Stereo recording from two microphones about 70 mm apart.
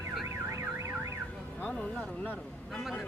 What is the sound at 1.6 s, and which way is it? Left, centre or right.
Speech, left.